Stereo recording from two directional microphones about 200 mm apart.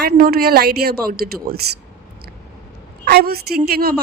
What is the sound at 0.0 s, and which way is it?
A woman's voice, 50° right (ahead or behind).